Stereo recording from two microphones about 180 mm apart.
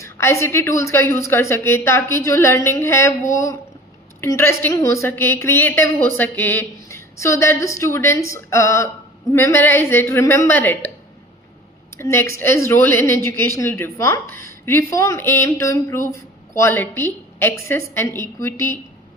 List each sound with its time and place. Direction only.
0.0 s a woman's voice: 15° left (ahead or behind)
11.9 s a woman's voice: 15° left (ahead or behind)